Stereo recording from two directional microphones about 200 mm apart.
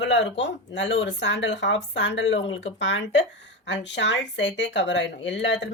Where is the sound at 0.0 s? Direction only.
65° left (ahead or behind).